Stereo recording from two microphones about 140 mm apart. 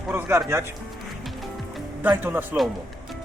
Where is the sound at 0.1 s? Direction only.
15° right (ahead or behind).